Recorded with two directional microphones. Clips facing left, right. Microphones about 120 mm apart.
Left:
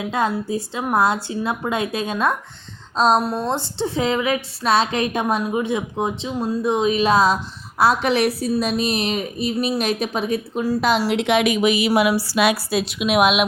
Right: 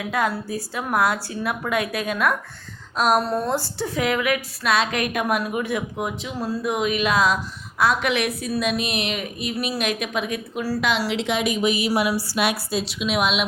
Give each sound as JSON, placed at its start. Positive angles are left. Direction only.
{"t": 0.0, "sound": "a woman's voice", "side_deg": 25}
{"t": 3.2, "sound": "a woman's voice", "side_deg": 15}
{"t": 12.8, "sound": "a woman's voice", "side_deg": 55}